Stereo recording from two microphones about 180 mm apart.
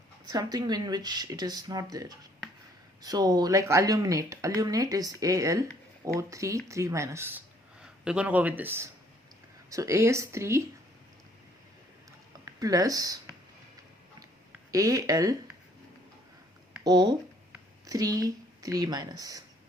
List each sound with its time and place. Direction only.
0.3 s speech: 20° right (ahead or behind)
12.5 s speech: 20° right (ahead or behind)
14.7 s speech: 20° right (ahead or behind)
16.8 s speech: 25° right (ahead or behind)